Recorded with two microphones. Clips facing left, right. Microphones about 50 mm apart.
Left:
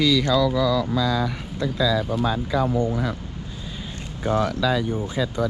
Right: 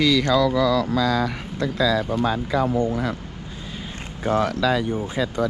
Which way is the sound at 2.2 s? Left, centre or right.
Right.